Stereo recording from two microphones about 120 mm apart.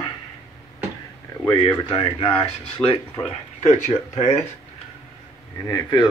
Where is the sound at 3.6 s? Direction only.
75° left (ahead or behind).